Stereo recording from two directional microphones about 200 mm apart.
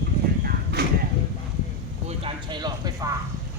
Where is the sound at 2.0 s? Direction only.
25° right (ahead or behind).